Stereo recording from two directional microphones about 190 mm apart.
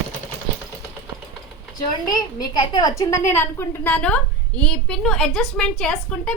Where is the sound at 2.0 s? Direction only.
20° left (ahead or behind).